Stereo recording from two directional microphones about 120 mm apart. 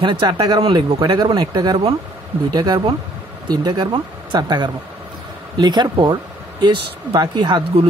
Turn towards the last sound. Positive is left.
turn(degrees=-35)  # may be behind; listen again after turning